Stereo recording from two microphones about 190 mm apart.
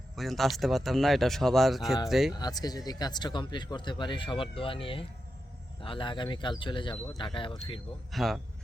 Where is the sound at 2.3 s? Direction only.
20° left (ahead or behind).